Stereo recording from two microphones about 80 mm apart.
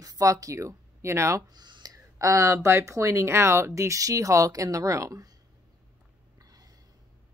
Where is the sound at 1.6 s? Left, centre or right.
Right.